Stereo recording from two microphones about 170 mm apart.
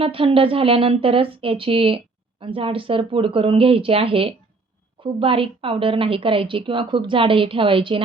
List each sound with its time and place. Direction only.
0.0 s a woman's voice: 30° right (ahead or behind)